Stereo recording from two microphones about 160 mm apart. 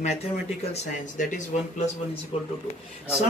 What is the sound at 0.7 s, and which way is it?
Speech, 50° left (ahead or behind).